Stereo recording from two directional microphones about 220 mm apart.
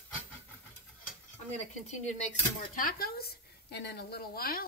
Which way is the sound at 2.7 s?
40° left (ahead or behind).